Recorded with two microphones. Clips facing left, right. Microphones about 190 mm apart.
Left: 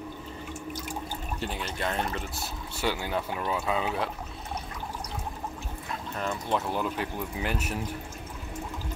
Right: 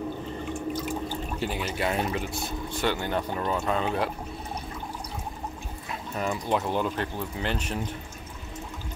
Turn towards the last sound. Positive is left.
turn(degrees=5)  # may be behind; listen again after turning